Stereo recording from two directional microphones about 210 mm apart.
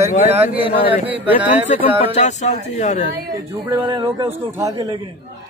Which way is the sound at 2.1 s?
35° left (ahead or behind).